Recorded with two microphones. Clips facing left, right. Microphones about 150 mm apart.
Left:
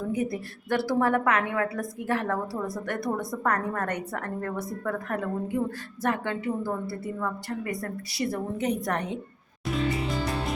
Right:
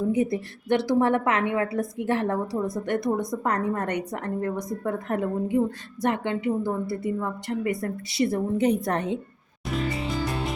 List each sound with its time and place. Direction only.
0.1 s a woman's voice: 25° right (ahead or behind)